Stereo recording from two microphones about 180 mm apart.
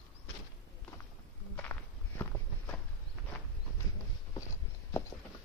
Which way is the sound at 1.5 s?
10° left (ahead or behind).